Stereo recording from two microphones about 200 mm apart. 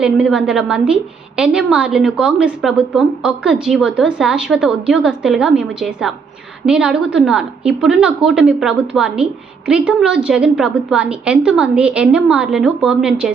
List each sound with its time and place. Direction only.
0.0 s a woman's voice: 5° right (ahead or behind)